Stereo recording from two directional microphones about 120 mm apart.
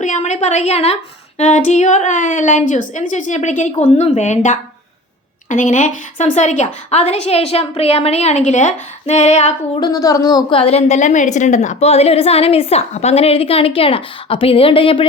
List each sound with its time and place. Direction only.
0.0 s a woman's voice: 80° left; by 0.9 s 60° left (ahead or behind)
1.4 s a woman's voice: 80° left
5.5 s a woman's voice: 90° left; by 8.4 s 60° left (ahead or behind)
8.4 s speech: 80° left
9.8 s a woman's voice: 30° left (ahead or behind)
10.6 s a woman's voice: 60° left (ahead or behind)